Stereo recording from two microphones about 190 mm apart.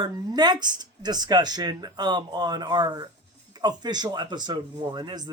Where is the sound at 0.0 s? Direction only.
20° right (ahead or behind).